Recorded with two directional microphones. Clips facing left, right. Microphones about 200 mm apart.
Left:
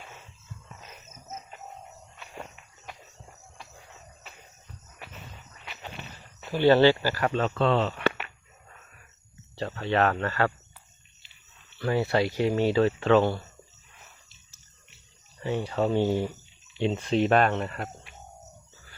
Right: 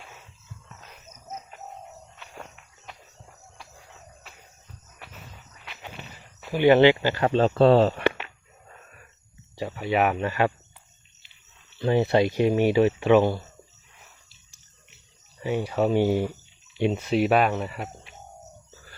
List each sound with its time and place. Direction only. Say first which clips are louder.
0.7 s music: left 1 dB; centre (ahead or behind)
2.3 s walk: left 2 dB; 5° left (ahead or behind)
6.5 s speech: right 2 dB; 15° right (ahead or behind); by 8.0 s 40° right (ahead or behind)
9.6 s speech: right 1 dB; 10° right (ahead or behind)
11.8 s speech: right 4 dB; 20° right (ahead or behind)
15.4 s speech: right 3 dB; 10° right (ahead or behind)